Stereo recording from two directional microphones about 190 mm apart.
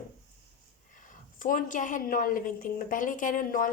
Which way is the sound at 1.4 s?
45° left (ahead or behind).